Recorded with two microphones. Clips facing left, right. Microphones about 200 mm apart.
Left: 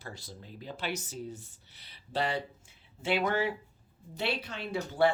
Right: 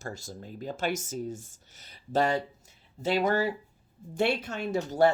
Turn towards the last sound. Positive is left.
turn(degrees=-45)  # may be behind; listen again after turning